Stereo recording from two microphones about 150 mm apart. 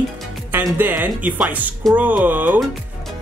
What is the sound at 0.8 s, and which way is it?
Speech, 10° right (ahead or behind).